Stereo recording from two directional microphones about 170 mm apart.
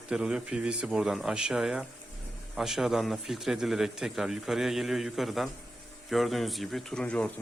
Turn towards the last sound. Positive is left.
turn(degrees=5)  # may be behind; listen again after turning